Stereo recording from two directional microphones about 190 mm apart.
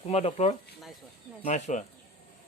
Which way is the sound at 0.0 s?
35° left (ahead or behind).